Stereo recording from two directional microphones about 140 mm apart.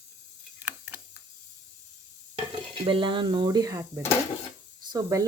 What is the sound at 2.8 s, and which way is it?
Speech, 35° right (ahead or behind).